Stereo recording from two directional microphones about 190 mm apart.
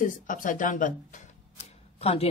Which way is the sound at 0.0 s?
45° left (ahead or behind).